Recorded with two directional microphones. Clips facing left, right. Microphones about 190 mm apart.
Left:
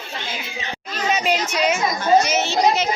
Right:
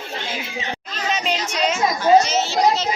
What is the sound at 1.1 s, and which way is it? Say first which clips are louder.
Speech: left 3 dB; 5° left (ahead or behind).